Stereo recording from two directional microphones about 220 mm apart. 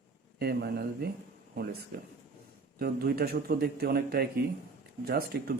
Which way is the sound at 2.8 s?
45° right (ahead or behind).